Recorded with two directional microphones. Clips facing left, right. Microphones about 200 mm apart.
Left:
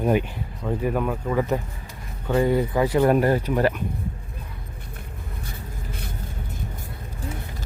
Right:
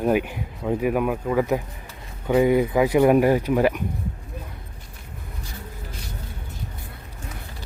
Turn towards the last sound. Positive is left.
turn(degrees=55)  # may be behind; listen again after turning